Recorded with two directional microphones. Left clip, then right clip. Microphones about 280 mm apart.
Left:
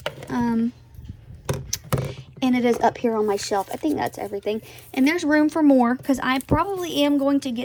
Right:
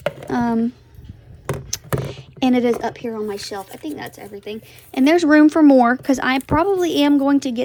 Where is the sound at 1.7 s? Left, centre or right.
Centre.